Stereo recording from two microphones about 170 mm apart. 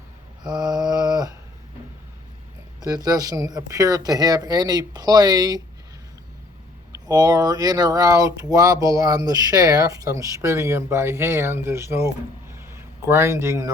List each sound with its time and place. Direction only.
0.4 s mantra: 25° right (ahead or behind)
2.8 s speech: 20° right (ahead or behind)
6.9 s speech: 20° right (ahead or behind)